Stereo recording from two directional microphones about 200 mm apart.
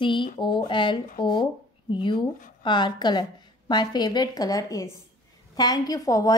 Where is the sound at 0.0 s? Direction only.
25° left (ahead or behind).